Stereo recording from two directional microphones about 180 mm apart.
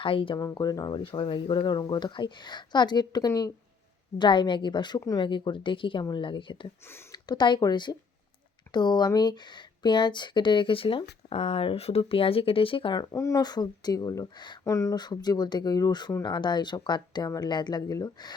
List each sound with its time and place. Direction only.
0.0 s speech: 30° left (ahead or behind)
6.8 s speech: 15° left (ahead or behind)
7.3 s speech: 25° left (ahead or behind)